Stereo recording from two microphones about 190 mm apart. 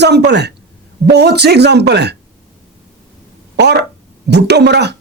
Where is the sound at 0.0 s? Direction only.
65° right (ahead or behind).